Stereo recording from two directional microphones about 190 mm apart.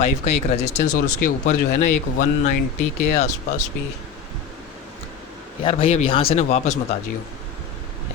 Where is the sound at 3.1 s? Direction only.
40° left (ahead or behind).